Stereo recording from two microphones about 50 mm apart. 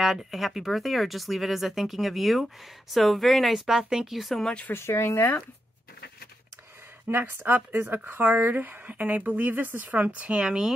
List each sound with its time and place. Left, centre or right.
0.0 s speech: centre
4.7 s speech: left
7.1 s speech: right; by 10.7 s centre